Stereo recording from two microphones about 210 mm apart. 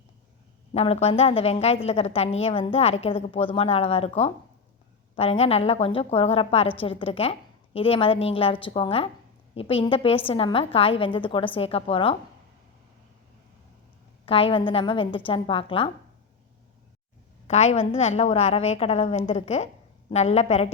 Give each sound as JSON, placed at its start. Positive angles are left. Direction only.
{"t": 0.7, "sound": "a woman's voice", "side_deg": 30}
{"t": 14.3, "sound": "a woman's voice", "side_deg": 25}
{"t": 17.4, "sound": "a woman's voice", "side_deg": 30}